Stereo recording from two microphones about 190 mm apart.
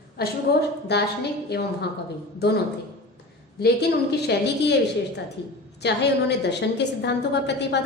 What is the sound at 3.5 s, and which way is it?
A woman's voice, 55° left (ahead or behind).